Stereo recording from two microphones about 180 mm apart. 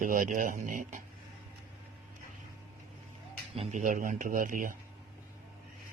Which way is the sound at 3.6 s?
45° right (ahead or behind).